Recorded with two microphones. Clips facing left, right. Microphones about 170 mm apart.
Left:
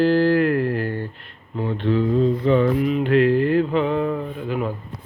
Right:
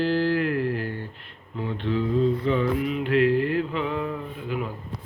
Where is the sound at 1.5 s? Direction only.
40° left (ahead or behind).